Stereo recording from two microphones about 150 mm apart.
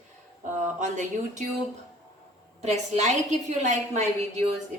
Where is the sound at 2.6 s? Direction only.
50° right (ahead or behind).